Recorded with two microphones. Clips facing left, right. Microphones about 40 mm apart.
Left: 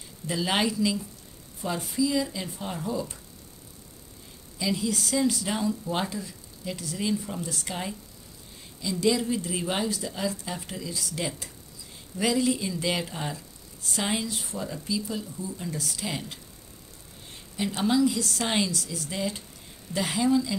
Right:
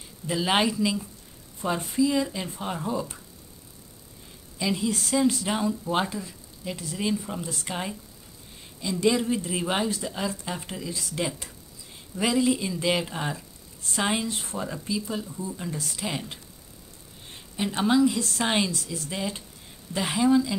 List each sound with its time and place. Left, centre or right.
0.3 s speech: centre
1.6 s speech: right
4.6 s speech: right
9.1 s speech: right
17.8 s speech: right